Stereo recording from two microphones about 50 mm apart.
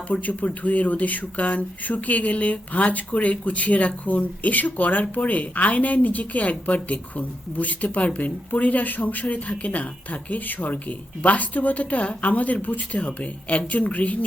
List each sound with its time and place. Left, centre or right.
0.1 s speech: left